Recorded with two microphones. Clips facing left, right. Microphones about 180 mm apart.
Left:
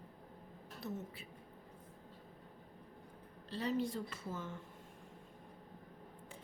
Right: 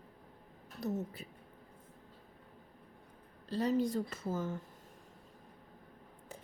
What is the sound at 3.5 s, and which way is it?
A woman's voice, 40° right (ahead or behind).